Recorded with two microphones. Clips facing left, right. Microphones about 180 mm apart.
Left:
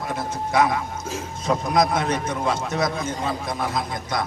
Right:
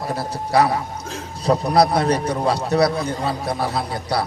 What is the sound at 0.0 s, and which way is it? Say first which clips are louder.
A man's voice: right 2 dB; 35° right (ahead or behind).